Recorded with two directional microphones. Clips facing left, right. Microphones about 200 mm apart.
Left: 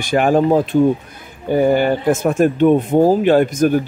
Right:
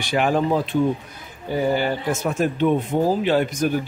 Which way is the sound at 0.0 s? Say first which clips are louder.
Left 6 dB; 50° left (ahead or behind).